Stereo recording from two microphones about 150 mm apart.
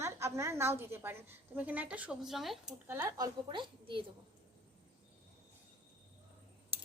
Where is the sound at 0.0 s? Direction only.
20° right (ahead or behind); by 2.7 s centre (ahead or behind).